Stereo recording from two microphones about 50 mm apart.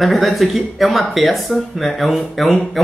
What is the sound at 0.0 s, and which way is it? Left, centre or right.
Speech, centre.